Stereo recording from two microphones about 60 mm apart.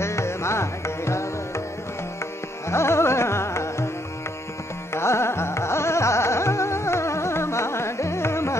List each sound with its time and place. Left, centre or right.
0.0 s music: left
2.7 s carnatic music: left
4.9 s carnatic music: left